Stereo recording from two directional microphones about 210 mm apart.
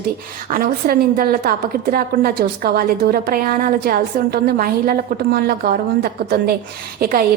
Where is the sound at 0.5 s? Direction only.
45° right (ahead or behind).